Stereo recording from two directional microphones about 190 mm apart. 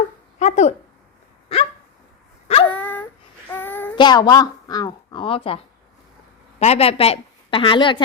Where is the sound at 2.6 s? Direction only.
10° left (ahead or behind).